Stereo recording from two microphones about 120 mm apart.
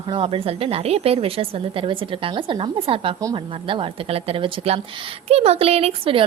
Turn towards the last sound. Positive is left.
turn(degrees=-55)  # may be behind; listen again after turning